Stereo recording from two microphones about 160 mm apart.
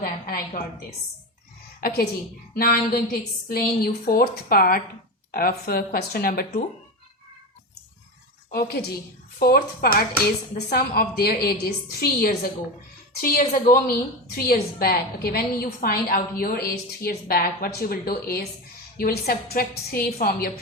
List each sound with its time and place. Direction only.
0.0 s a sound: 70° left (ahead or behind)
1.8 s a woman's voice: 70° left (ahead or behind)
8.4 s a woman's voice: 70° left (ahead or behind)